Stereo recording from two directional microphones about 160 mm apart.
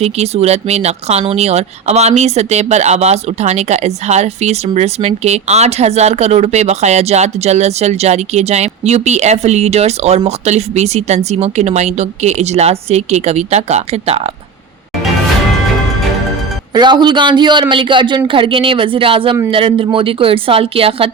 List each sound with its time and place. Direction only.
0.0 s speech: 40° right (ahead or behind)
16.7 s a man's voice: 30° right (ahead or behind)